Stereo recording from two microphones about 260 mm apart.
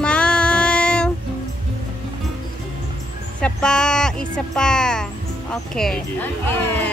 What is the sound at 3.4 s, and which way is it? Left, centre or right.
A woman's voice, centre.